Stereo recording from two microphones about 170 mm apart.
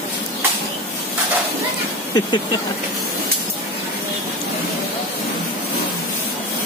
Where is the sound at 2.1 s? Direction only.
25° left (ahead or behind).